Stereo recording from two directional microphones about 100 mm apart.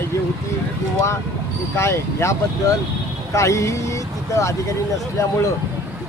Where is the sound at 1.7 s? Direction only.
25° left (ahead or behind).